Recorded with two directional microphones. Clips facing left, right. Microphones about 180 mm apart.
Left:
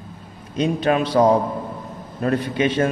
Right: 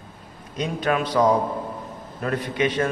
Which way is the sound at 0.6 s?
30° left (ahead or behind).